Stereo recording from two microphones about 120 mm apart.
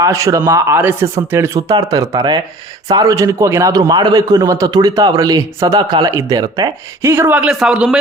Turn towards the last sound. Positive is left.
turn(degrees=-5)  # may be behind; listen again after turning